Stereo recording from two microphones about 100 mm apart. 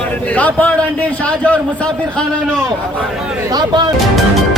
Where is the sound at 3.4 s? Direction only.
45° right (ahead or behind).